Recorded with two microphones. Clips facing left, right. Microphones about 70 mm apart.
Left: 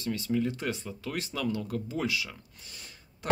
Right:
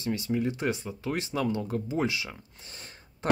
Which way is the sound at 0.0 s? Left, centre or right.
Right.